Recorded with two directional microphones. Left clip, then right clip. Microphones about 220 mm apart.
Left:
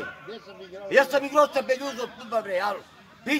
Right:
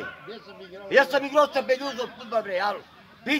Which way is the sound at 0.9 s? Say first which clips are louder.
Even; 25° right (ahead or behind).